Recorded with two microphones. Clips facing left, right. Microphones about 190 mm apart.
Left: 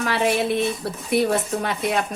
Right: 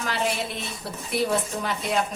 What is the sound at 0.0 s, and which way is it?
A woman's voice, 65° left (ahead or behind).